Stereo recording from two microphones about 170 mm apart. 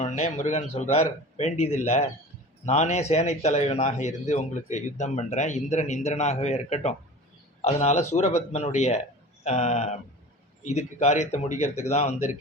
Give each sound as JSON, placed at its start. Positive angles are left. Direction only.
{"t": 0.0, "sound": "speech", "side_deg": 45}